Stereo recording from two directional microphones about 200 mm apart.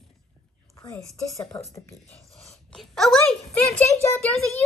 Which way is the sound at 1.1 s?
5° left (ahead or behind).